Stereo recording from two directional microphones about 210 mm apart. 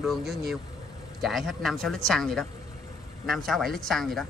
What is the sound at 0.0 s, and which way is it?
A woman's voice, centre (ahead or behind).